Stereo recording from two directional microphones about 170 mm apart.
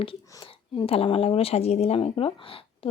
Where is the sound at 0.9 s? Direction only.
35° left (ahead or behind).